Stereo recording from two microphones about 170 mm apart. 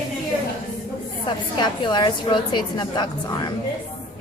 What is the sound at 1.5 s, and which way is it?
A woman's voice, 25° left (ahead or behind).